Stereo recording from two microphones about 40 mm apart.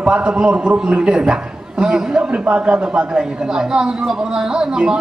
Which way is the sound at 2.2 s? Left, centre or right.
Right.